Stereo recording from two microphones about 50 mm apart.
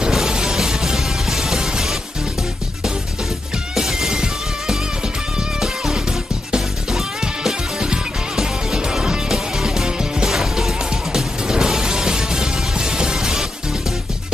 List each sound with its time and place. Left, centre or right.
0.1 s music: centre
3.7 s music: centre
6.5 s music: centre